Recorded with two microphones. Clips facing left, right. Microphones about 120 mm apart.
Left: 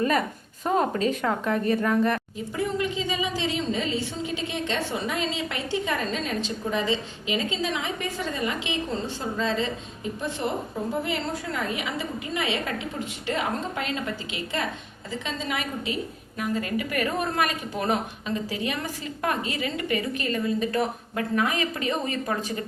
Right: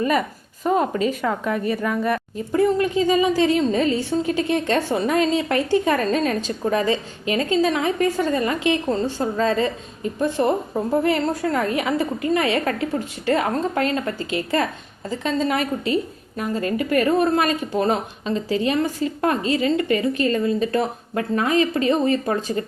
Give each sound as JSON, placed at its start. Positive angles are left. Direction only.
{"t": 1.2, "sound": "a woman's voice", "side_deg": -5}
{"t": 2.5, "sound": "a woman's voice", "side_deg": -45}